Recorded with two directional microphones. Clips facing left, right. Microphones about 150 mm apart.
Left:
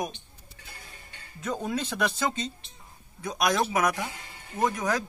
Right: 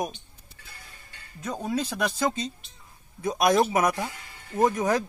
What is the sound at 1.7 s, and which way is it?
Speech, 10° right (ahead or behind).